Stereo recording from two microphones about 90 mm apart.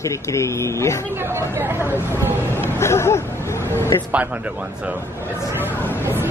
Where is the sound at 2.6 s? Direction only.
30° left (ahead or behind).